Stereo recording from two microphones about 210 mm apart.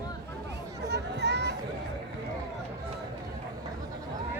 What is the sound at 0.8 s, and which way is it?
Children playing, 55° right (ahead or behind).